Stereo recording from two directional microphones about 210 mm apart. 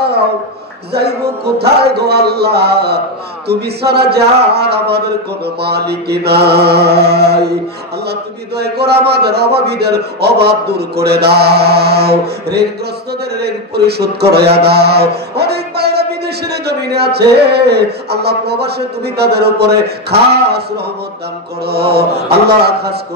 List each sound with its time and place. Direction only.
0.9 s a man's voice: 50° right (ahead or behind)